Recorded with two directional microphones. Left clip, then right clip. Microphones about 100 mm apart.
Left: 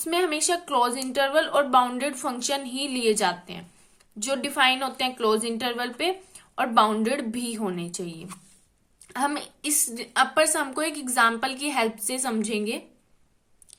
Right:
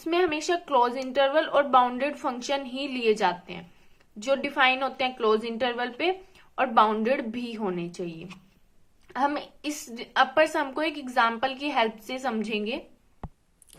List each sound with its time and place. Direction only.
0.0 s a woman's voice: 25° left (ahead or behind)